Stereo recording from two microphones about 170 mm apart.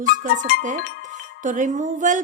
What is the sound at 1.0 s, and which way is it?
Music, 45° right (ahead or behind).